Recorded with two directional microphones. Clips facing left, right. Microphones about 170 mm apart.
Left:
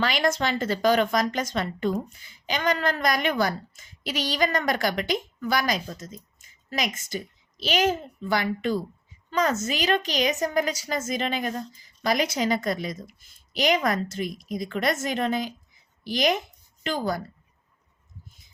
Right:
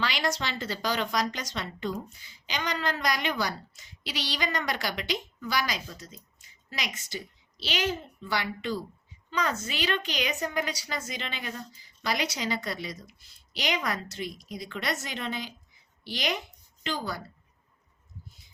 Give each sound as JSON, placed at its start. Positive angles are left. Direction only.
{"t": 0.0, "sound": "a woman's voice", "side_deg": 50}